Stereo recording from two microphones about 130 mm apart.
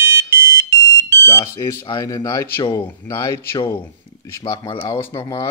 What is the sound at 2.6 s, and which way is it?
Speech, 40° left (ahead or behind).